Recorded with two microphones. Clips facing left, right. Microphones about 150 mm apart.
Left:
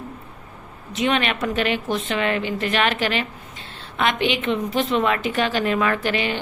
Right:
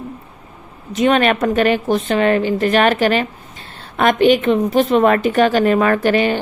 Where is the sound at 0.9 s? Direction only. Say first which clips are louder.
Right 8 dB; 45° right (ahead or behind).